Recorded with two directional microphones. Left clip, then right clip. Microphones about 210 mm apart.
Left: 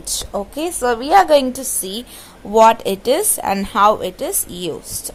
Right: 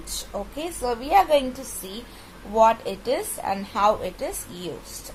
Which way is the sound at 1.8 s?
50° left (ahead or behind).